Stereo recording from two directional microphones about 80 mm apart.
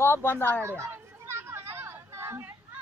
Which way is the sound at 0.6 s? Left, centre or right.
Right.